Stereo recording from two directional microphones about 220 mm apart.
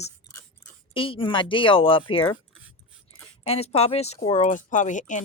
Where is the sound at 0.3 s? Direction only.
10° left (ahead or behind).